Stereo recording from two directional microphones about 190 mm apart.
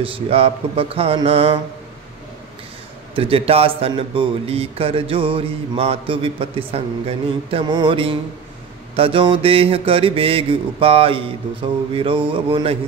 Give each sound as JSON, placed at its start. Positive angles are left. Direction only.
{"t": 0.0, "sound": "a man's voice", "side_deg": -30}
{"t": 3.2, "sound": "a man's voice", "side_deg": -30}